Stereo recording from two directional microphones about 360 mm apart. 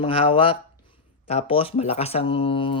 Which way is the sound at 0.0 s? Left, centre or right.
Centre.